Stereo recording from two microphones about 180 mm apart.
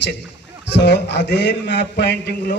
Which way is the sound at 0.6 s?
70° left (ahead or behind).